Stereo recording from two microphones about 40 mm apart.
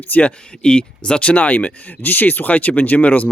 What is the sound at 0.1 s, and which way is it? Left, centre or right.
Speech, left.